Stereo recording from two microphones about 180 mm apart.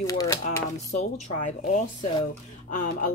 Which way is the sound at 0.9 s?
40° left (ahead or behind).